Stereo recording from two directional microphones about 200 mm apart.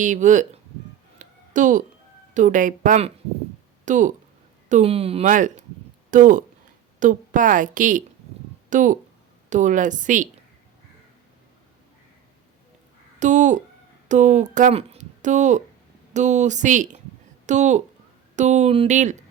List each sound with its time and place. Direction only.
0.0 s a woman's voice: 40° right (ahead or behind)
1.2 s a sound: 40° right (ahead or behind)
2.3 s a woman's voice: 40° right (ahead or behind)
13.1 s a woman's voice: 40° right (ahead or behind)